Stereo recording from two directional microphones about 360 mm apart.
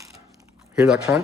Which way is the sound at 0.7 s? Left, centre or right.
Centre.